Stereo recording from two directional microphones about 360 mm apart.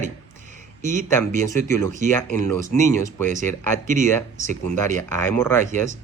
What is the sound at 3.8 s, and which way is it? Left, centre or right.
Speech, right.